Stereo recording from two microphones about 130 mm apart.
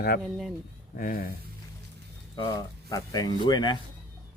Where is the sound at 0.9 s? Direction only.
90° left.